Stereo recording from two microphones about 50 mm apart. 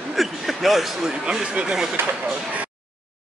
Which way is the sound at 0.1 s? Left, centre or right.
Centre.